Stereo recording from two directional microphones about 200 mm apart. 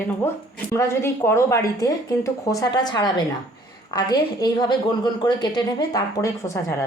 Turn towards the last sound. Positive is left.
turn(degrees=15)  # may be behind; listen again after turning